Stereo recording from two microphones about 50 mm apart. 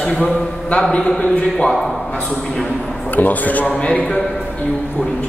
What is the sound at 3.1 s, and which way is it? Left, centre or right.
Speech, left.